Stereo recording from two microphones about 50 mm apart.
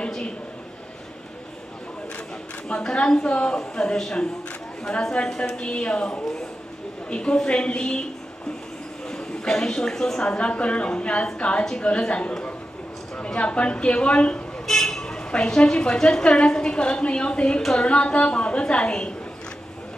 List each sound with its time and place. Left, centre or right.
2.7 s a woman's voice: centre
5.4 s a woman's voice: centre
14.7 s a woman's voice: centre